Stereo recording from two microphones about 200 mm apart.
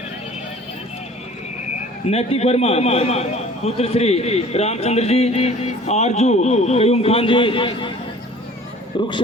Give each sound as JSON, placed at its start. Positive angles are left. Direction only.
{"t": 2.0, "sound": "a man's voice", "side_deg": 30}
{"t": 9.0, "sound": "speech", "side_deg": 25}